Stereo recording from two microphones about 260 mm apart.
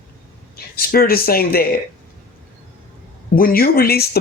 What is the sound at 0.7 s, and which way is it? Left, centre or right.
Speech, left.